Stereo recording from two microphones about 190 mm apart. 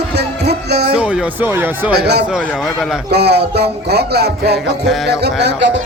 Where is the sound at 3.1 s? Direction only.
60° right (ahead or behind).